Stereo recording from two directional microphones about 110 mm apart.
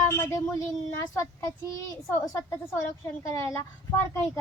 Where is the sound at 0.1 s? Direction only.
25° left (ahead or behind).